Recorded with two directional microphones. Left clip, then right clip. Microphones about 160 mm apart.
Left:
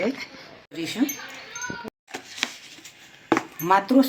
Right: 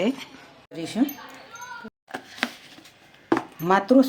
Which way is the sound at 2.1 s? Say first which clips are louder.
Even; 60° right (ahead or behind).